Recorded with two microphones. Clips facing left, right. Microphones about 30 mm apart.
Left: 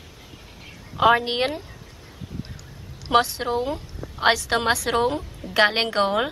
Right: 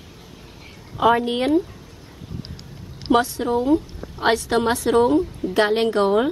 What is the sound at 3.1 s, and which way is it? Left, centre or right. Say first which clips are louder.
A woman's voice: right 2 dB; left.